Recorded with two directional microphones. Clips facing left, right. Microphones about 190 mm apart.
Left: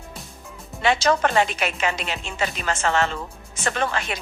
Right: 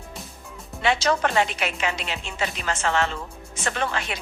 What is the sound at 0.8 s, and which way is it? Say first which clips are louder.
A woman's voice: left 2 dB; 45° left (ahead or behind).